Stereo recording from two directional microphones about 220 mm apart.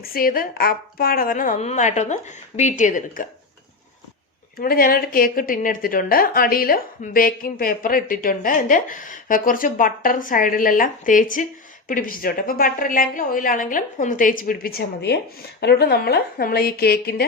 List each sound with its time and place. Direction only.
0.0 s speech: 40° left (ahead or behind)
4.5 s speech: 40° left (ahead or behind)